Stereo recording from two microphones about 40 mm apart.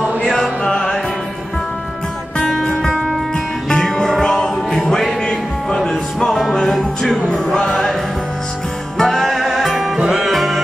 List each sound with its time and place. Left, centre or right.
0.3 s music: centre
2.3 s music: centre
3.8 s music: centre
4.9 s music: centre
8.9 s music: centre